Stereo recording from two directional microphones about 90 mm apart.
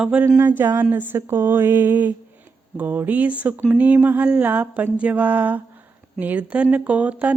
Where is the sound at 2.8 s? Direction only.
20° right (ahead or behind).